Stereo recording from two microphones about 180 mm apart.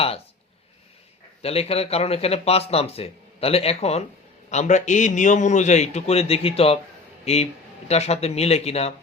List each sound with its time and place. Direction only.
1.4 s speech: 35° left (ahead or behind)
7.9 s speech: 35° left (ahead or behind)